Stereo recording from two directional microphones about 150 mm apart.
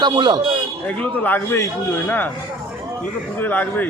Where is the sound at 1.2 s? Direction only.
15° left (ahead or behind).